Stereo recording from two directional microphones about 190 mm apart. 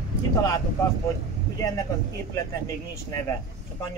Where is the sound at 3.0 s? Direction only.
15° left (ahead or behind).